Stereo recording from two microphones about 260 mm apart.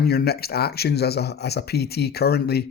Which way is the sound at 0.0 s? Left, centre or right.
Left.